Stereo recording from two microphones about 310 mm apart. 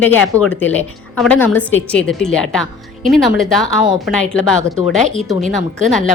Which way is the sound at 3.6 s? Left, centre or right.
Centre.